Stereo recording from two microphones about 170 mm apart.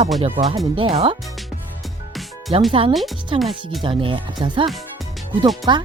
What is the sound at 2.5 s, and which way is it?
Speech, 30° right (ahead or behind).